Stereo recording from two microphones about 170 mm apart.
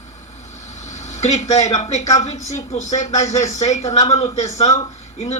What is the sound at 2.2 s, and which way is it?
Speech, 40° left (ahead or behind).